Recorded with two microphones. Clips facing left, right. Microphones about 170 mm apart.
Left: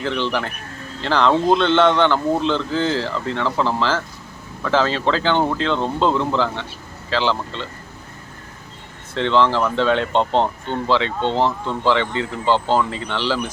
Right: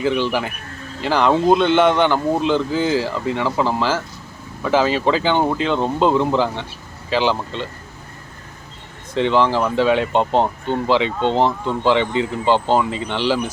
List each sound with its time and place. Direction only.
0.0 s speech: 10° right (ahead or behind)
9.1 s speech: 15° right (ahead or behind)